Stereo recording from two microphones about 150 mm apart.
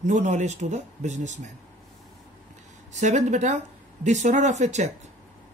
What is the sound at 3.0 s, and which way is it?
Speech, 50° right (ahead or behind).